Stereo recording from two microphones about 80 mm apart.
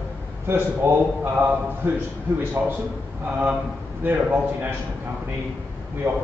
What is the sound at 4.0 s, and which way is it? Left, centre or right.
Speech, right.